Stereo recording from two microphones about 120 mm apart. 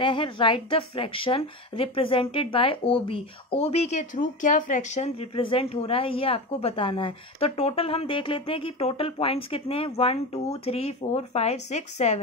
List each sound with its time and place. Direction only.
0.0 s speech: 45° left (ahead or behind); by 5.1 s 85° left
5.3 s speech: 50° left (ahead or behind); by 12.2 s 70° left (ahead or behind)